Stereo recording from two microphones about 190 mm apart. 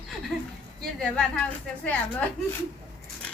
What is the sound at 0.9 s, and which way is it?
A woman's voice, 5° left (ahead or behind).